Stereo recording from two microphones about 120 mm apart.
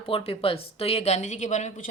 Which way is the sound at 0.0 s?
50° left (ahead or behind).